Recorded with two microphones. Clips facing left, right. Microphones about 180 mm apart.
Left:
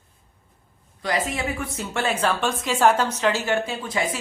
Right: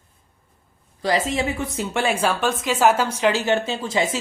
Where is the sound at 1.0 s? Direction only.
25° right (ahead or behind).